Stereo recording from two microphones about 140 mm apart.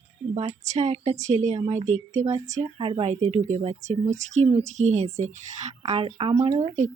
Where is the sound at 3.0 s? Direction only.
55° right (ahead or behind).